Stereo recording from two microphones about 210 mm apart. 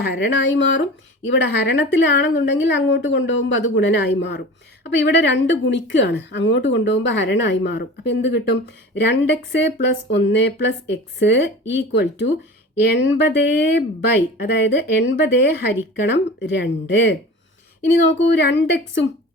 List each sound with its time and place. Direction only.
0.0 s speech: 55° left (ahead or behind)
18.2 s speech: 55° left (ahead or behind)